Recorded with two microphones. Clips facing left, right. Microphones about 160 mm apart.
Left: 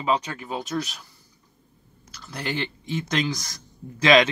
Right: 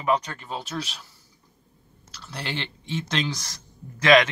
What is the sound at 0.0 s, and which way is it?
Speech, 10° left (ahead or behind).